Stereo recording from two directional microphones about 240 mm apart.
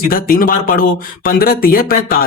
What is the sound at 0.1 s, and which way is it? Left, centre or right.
Speech, left.